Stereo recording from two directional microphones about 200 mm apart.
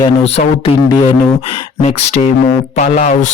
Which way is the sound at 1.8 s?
35° left (ahead or behind).